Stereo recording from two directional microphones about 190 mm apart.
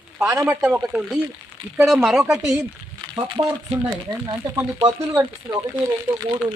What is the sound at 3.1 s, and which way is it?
Speech, 25° right (ahead or behind).